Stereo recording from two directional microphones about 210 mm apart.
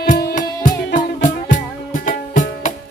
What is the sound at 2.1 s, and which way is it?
Music, 40° left (ahead or behind).